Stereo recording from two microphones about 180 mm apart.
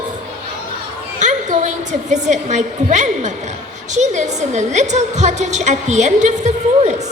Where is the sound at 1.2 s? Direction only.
40° right (ahead or behind).